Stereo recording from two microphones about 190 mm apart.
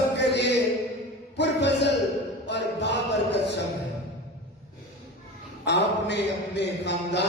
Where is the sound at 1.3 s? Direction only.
65° left (ahead or behind).